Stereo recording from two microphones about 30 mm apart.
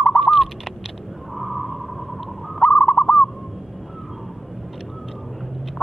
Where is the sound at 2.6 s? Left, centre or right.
Left.